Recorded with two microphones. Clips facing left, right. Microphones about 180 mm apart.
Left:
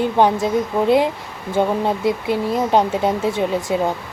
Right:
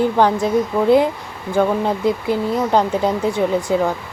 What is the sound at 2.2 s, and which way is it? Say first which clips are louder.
A woman's voice: right 1 dB; 20° left (ahead or behind).